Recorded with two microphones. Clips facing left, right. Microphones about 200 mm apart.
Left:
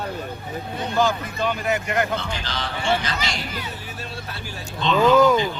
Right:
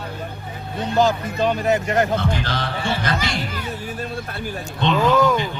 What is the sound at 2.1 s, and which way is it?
Speech, 55° right (ahead or behind).